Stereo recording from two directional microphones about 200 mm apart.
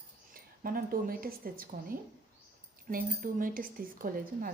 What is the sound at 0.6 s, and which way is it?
Speech, 45° right (ahead or behind).